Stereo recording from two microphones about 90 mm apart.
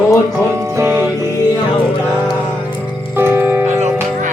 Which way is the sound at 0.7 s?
25° right (ahead or behind).